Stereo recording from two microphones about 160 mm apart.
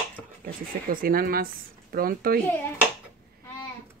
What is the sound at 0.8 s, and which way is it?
Speech, 65° right (ahead or behind).